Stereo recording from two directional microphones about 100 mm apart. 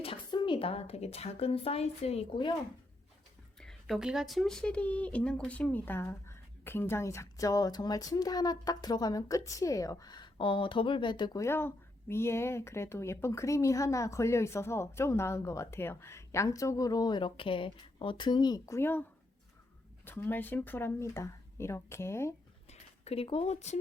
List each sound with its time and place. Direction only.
0.3 s a woman's voice: 50° left (ahead or behind); by 2.4 s 90° left
3.6 s speech: centre (ahead or behind); by 11.3 s 50° left (ahead or behind)
11.3 s speech: 25° left (ahead or behind)
20.1 s speech: 20° left (ahead or behind)
22.7 s a sound: 85° left